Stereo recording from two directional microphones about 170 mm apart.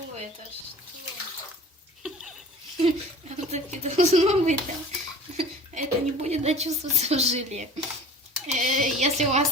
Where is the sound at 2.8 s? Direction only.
40° right (ahead or behind).